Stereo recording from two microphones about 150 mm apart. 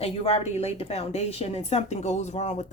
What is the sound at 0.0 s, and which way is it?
Speech, 40° left (ahead or behind).